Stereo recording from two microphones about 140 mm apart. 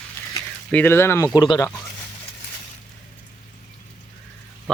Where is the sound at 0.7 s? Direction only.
15° left (ahead or behind); by 1.6 s 30° left (ahead or behind).